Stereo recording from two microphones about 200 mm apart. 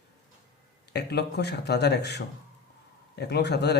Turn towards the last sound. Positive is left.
turn(degrees=55)  # may be behind; listen again after turning